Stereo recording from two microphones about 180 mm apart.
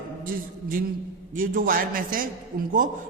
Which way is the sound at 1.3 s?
50° right (ahead or behind).